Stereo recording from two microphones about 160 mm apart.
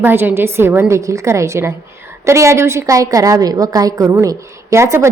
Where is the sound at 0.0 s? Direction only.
15° right (ahead or behind).